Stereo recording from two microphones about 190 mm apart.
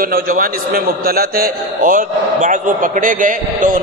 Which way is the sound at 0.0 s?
50° right (ahead or behind).